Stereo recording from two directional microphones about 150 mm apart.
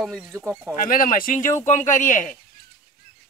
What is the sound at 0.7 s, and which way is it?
Speech, 70° left (ahead or behind).